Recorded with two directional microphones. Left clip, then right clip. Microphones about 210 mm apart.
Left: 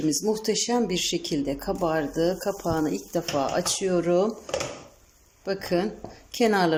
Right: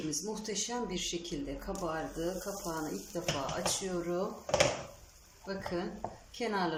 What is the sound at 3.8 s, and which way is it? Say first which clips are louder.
Speech: left 13 dB; 45° left (ahead or behind).